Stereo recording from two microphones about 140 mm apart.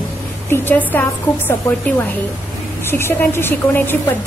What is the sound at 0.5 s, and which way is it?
Speech, 15° left (ahead or behind).